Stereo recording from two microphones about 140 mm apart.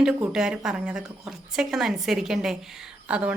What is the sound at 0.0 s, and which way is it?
Speech, 5° right (ahead or behind).